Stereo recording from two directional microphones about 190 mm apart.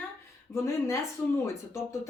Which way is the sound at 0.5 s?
15° left (ahead or behind).